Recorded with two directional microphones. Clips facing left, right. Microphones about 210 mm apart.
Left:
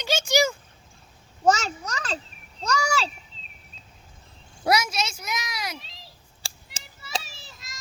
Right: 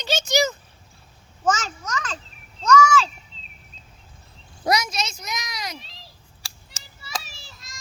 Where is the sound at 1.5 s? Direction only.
35° left (ahead or behind).